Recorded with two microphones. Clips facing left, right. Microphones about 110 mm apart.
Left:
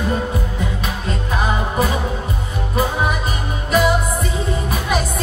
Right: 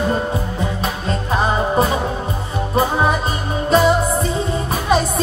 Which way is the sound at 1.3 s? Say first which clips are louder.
Right 4 dB; 30° right (ahead or behind).